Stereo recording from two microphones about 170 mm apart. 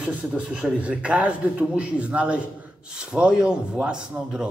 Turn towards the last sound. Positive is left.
turn(degrees=-5)  # may be behind; listen again after turning